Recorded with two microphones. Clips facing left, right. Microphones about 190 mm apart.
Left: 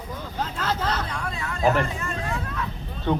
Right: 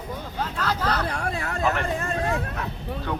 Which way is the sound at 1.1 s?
70° right (ahead or behind).